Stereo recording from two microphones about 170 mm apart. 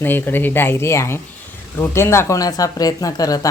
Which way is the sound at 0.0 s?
10° left (ahead or behind).